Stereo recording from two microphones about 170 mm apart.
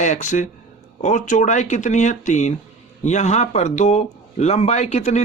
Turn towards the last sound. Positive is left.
turn(degrees=40)  # may be behind; listen again after turning